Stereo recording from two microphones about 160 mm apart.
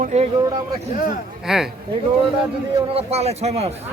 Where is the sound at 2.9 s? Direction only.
40° right (ahead or behind).